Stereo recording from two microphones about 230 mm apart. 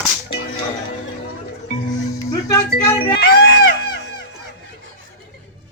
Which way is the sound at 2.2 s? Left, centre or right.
Centre.